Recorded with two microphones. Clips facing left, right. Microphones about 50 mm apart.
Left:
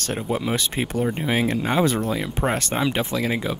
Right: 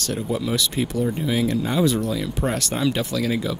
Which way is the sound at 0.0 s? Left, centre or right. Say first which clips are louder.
Even; left.